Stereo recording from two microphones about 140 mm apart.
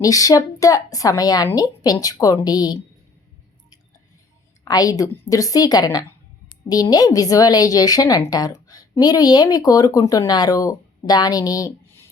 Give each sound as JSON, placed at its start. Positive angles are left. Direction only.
{"t": 0.0, "sound": "speech", "side_deg": 25}
{"t": 4.6, "sound": "speech", "side_deg": 25}